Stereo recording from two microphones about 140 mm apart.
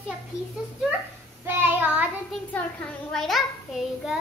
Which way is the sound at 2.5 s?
5° left (ahead or behind).